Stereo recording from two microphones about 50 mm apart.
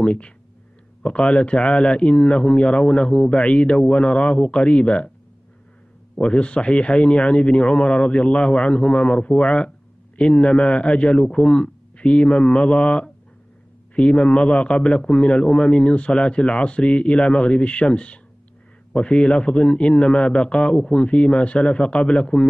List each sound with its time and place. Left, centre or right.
0.0 s a man's voice: left
6.1 s a man's voice: left
14.9 s a man's voice: centre